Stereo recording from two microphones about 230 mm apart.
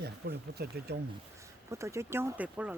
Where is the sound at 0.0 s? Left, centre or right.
Right.